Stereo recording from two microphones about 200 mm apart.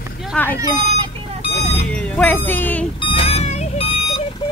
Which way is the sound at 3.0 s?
25° left (ahead or behind).